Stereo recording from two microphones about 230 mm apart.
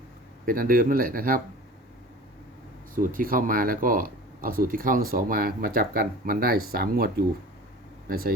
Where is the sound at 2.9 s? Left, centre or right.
Right.